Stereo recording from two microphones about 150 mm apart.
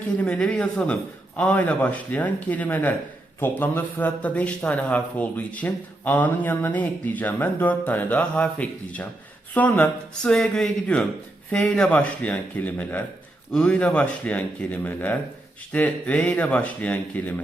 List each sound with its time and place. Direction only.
0.2 s a man's voice: 5° left (ahead or behind)